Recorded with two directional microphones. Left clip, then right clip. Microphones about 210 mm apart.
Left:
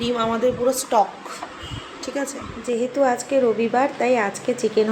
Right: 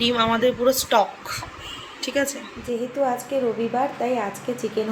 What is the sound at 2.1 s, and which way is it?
Speech, 5° right (ahead or behind).